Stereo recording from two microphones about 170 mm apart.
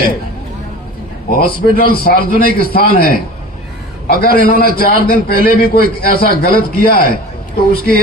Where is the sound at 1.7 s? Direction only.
60° left (ahead or behind).